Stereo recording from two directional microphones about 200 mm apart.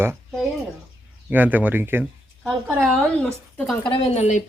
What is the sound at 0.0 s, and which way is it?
A woman's voice, 10° right (ahead or behind).